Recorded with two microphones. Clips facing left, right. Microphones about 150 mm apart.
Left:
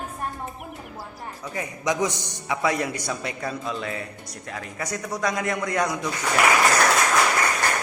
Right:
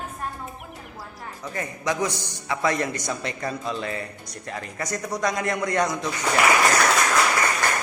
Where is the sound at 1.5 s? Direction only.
15° left (ahead or behind).